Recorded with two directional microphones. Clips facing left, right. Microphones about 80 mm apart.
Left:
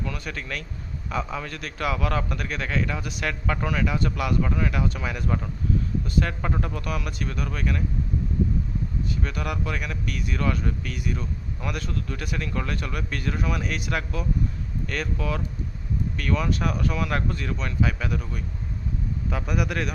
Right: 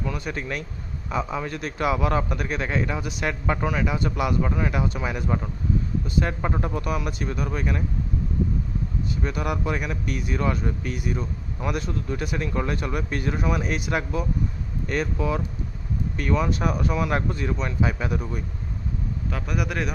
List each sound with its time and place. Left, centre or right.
0.0 s a man's voice: centre
9.2 s a man's voice: centre
19.3 s a man's voice: centre